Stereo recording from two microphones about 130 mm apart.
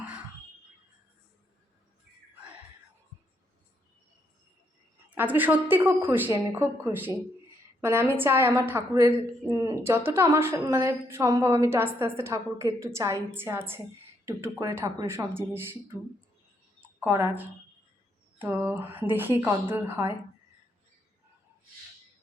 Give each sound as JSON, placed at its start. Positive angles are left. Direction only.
{"t": 5.1, "sound": "a woman's voice", "side_deg": -15}
{"t": 17.0, "sound": "a woman's voice", "side_deg": -20}